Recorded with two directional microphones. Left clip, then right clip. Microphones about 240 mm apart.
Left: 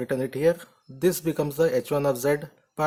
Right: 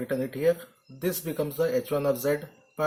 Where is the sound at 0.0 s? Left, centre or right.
Left.